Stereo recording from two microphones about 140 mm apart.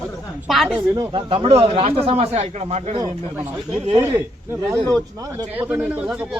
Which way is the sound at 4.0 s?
15° right (ahead or behind).